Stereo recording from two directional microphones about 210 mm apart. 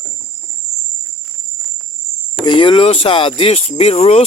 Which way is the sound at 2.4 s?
25° left (ahead or behind).